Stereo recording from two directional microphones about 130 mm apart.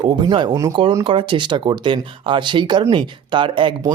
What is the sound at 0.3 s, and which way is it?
Speech, 35° right (ahead or behind).